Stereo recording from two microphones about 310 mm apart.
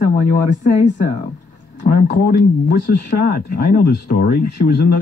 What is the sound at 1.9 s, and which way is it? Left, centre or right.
Speech, left.